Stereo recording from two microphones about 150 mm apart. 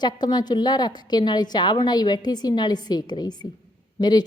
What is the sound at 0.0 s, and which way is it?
A woman's voice, 25° left (ahead or behind).